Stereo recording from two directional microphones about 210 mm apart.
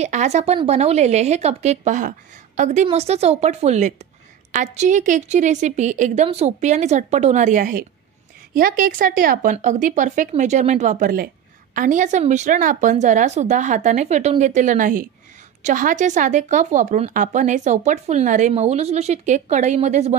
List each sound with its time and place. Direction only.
0.0 s speech: 35° right (ahead or behind)